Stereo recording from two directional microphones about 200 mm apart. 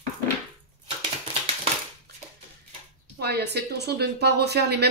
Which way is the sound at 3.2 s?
55° right (ahead or behind).